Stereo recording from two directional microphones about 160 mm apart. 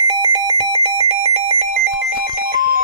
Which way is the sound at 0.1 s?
30° right (ahead or behind).